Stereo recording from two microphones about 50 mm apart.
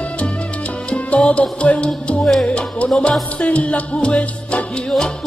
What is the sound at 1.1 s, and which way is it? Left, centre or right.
Music, left.